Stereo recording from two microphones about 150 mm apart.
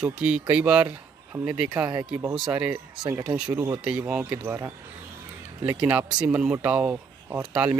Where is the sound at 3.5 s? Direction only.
20° right (ahead or behind).